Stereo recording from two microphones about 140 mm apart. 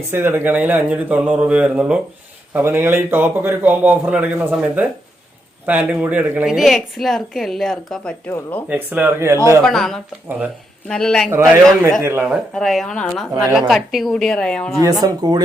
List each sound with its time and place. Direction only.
0.1 s a man's voice: 15° right (ahead or behind); by 8.1 s 5° left (ahead or behind)
8.3 s speech: 15° left (ahead or behind)
8.7 s a man's voice: 10° right (ahead or behind)
9.6 s a woman's voice: centre (ahead or behind)
10.2 s a man's voice: 10° right (ahead or behind)
10.8 s a woman's voice: 5° left (ahead or behind)
11.3 s a man's voice: 15° right (ahead or behind)
12.5 s a woman's voice: centre (ahead or behind)
15.0 s speech: 30° right (ahead or behind)